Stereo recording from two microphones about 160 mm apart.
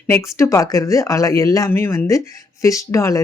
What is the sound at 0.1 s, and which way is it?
Speech, 15° left (ahead or behind).